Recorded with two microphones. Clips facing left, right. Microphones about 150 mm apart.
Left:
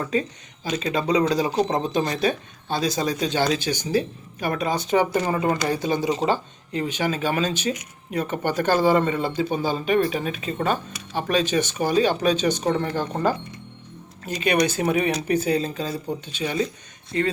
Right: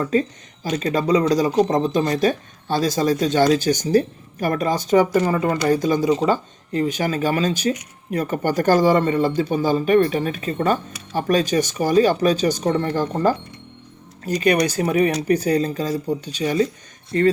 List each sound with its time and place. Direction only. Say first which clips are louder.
0.0 s speech: right 5 dB; 40° right (ahead or behind)
5.3 s speech: right 2 dB; 25° left (ahead or behind)
5.6 s speech: right 5 dB; 45° right (ahead or behind)